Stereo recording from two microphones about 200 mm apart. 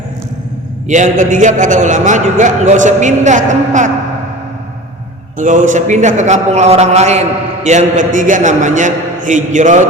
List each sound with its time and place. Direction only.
0.9 s a man's voice: 40° right (ahead or behind)
5.4 s a man's voice: 40° right (ahead or behind)